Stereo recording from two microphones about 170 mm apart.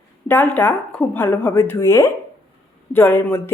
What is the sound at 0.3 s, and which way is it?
Speech, 10° left (ahead or behind).